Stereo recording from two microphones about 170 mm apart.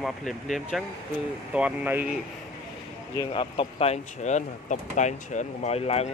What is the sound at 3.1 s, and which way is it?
Speech, 30° left (ahead or behind).